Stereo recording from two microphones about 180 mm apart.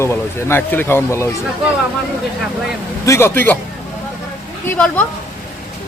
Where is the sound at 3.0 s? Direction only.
15° left (ahead or behind).